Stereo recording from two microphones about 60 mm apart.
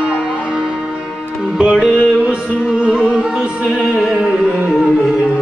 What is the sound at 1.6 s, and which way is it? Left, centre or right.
Music, centre.